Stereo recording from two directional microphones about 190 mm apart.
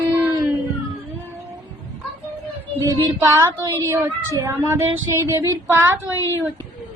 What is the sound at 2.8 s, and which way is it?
Speech, 15° right (ahead or behind).